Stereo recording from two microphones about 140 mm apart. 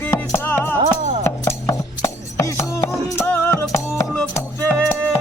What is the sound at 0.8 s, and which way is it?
Music, 55° right (ahead or behind).